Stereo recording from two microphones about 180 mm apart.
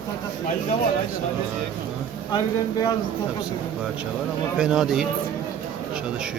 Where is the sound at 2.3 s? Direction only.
25° left (ahead or behind).